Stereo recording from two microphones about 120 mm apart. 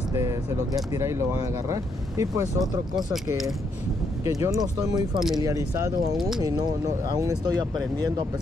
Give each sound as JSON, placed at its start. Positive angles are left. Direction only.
{"t": 0.7, "sound": "speech", "side_deg": -25}
{"t": 4.2, "sound": "speech", "side_deg": -25}
{"t": 6.1, "sound": "speech", "side_deg": 0}
{"t": 7.2, "sound": "speech", "side_deg": -30}